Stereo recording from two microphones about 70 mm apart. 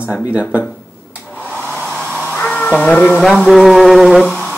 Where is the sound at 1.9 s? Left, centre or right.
Centre.